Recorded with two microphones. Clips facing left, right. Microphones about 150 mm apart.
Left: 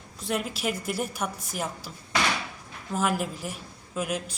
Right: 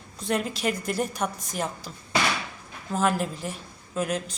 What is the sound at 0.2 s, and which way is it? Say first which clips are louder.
A woman's voice: right 3 dB; 5° left (ahead or behind).